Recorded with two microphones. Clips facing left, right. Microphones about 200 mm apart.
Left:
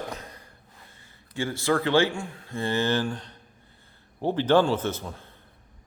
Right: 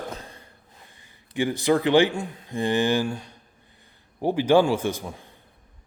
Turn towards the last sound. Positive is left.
turn(degrees=-15)  # may be behind; listen again after turning